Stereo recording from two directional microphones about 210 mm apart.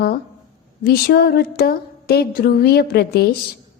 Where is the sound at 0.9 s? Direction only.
50° left (ahead or behind).